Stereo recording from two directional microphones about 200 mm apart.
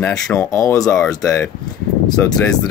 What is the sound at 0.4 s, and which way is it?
Speech, 15° left (ahead or behind).